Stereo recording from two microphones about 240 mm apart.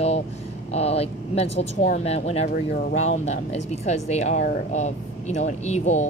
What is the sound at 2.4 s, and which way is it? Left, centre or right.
Speech, left.